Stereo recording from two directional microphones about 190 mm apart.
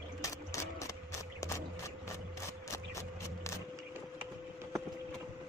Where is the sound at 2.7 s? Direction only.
15° left (ahead or behind).